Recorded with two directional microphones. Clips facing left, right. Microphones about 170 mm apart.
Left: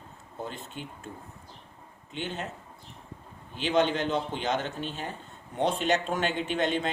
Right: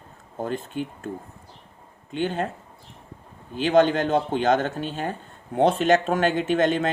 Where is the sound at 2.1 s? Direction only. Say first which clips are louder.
Right 9 dB; 50° right (ahead or behind).